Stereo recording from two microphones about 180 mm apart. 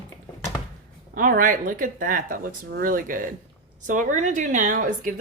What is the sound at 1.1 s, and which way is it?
Speech, 50° right (ahead or behind).